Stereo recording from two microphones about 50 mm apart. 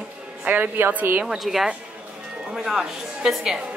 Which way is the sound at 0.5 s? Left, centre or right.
Right.